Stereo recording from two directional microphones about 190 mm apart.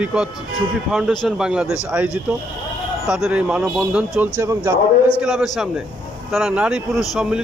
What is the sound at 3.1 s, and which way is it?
A man's voice, 5° right (ahead or behind).